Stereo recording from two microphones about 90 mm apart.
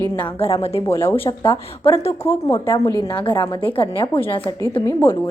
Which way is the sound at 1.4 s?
75° left (ahead or behind).